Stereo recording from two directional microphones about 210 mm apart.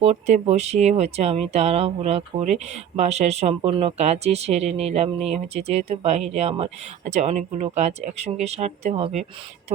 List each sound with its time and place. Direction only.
0.0 s speech: 30° right (ahead or behind)